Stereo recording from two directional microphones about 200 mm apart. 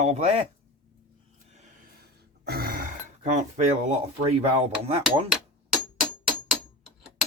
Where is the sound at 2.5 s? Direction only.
50° right (ahead or behind).